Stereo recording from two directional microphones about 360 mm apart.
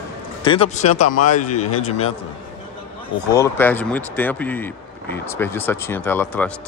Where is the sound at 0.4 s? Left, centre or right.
Centre.